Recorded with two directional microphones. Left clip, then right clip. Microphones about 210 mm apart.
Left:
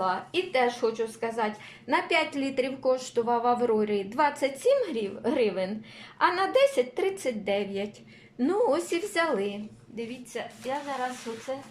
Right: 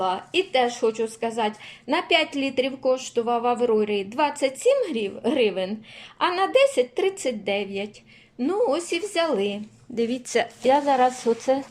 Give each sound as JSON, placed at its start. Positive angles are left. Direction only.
{"t": 0.0, "sound": "speech", "side_deg": -10}
{"t": 9.9, "sound": "a woman's voice", "side_deg": -40}